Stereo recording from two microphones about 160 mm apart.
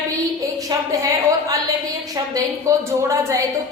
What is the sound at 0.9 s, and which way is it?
A woman's voice, 20° right (ahead or behind).